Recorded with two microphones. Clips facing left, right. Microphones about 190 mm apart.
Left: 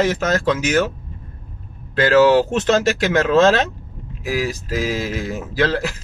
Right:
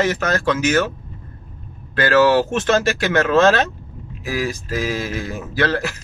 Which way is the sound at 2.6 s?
20° left (ahead or behind).